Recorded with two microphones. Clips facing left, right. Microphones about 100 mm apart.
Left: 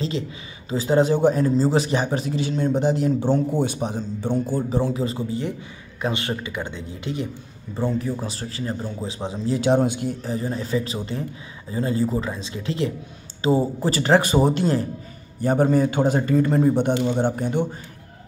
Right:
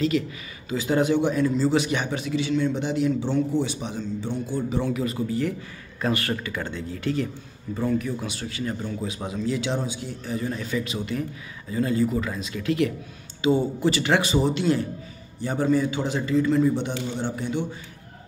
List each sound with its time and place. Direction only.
0.7 s a man's voice: 30° left (ahead or behind)
7.7 s a man's voice: 30° left (ahead or behind)
9.6 s speech: 55° left (ahead or behind)
10.2 s a man's voice: 30° left (ahead or behind); by 17.6 s 50° left (ahead or behind)